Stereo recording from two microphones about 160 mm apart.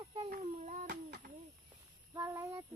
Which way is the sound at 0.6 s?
55° right (ahead or behind).